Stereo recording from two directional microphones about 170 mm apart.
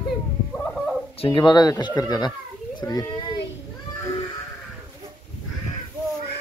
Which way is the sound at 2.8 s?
20° left (ahead or behind).